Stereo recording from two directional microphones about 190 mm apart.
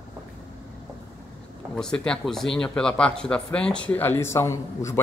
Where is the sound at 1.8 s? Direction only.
5° left (ahead or behind).